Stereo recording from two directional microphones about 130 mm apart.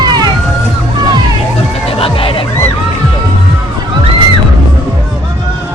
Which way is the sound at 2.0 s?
45° left (ahead or behind).